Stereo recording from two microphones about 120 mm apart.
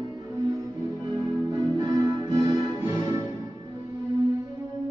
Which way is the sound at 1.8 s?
30° right (ahead or behind).